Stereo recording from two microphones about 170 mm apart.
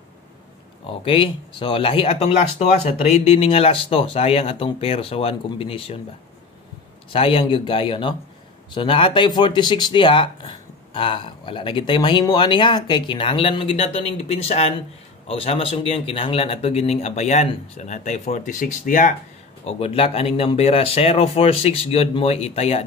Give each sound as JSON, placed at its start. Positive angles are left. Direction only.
{"t": 1.0, "sound": "speech", "side_deg": 30}
{"t": 7.1, "sound": "speech", "side_deg": 35}
{"t": 19.6, "sound": "speech", "side_deg": 35}